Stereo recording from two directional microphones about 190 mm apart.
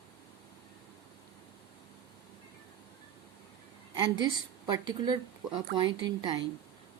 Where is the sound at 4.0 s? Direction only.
25° right (ahead or behind).